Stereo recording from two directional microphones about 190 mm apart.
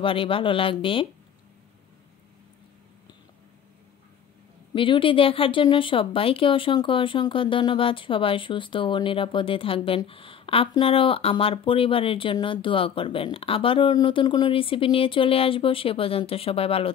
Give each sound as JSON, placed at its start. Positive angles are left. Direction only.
{"t": 0.0, "sound": "speech", "side_deg": 30}
{"t": 4.7, "sound": "speech", "side_deg": 25}